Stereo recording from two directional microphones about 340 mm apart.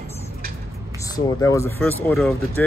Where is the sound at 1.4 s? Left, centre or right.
Centre.